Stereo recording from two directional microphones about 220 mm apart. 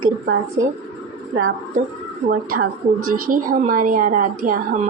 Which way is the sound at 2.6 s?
40° right (ahead or behind).